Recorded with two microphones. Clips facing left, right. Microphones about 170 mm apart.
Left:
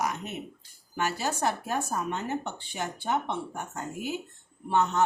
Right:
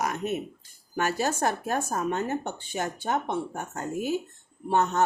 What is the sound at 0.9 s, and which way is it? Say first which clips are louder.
Speech: right 3 dB; 50° right (ahead or behind).